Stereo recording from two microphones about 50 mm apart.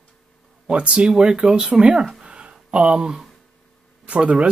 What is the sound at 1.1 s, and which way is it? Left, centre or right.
Speech, centre.